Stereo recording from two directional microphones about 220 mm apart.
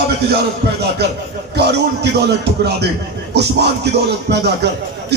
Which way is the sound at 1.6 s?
50° right (ahead or behind).